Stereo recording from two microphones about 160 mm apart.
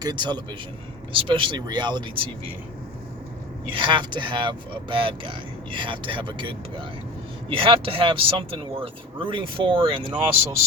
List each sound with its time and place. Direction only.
0.0 s a man's voice: 25° right (ahead or behind)
3.7 s speech: 30° right (ahead or behind)